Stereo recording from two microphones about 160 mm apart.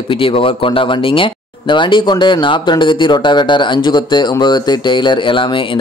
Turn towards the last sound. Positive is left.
turn(degrees=30)  # may be behind; listen again after turning